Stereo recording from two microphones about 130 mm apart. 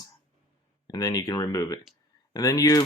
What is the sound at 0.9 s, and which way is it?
Speech, 30° left (ahead or behind).